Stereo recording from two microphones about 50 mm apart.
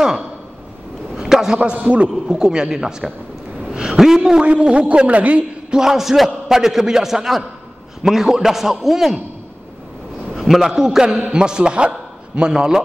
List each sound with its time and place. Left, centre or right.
1.1 s a sound: centre
1.6 s a man's voice: right
2.2 s a man's voice: centre
3.7 s a sound: centre
4.2 s a man's voice: right
5.7 s a man's voice: centre
10.3 s a man's voice: centre